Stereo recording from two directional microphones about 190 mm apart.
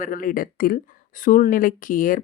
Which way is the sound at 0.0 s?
45° left (ahead or behind).